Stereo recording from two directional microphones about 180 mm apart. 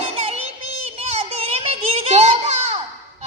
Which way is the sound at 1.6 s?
35° right (ahead or behind).